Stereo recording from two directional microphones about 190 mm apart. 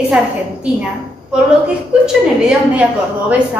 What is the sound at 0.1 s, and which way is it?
Speech, 5° right (ahead or behind).